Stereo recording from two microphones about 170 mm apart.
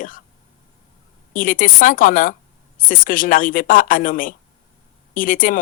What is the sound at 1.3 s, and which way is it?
Speech, 55° left (ahead or behind).